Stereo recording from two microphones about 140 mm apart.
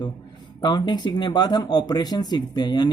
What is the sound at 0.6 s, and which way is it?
Speech, 30° left (ahead or behind).